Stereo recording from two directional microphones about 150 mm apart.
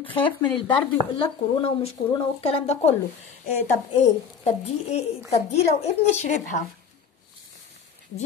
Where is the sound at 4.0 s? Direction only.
45° left (ahead or behind).